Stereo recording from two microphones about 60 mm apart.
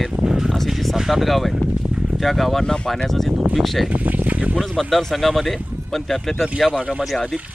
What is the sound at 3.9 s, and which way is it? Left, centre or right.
Speech, right.